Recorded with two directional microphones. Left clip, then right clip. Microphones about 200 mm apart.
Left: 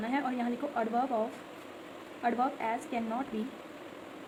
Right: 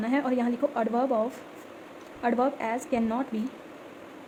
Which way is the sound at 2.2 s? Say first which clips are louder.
Right 4 dB; 40° right (ahead or behind).